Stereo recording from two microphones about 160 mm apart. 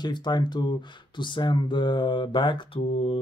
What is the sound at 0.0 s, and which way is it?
Speech, 25° left (ahead or behind).